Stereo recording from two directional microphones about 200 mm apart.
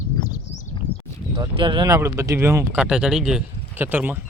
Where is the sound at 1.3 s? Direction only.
25° right (ahead or behind); by 4.2 s 10° right (ahead or behind).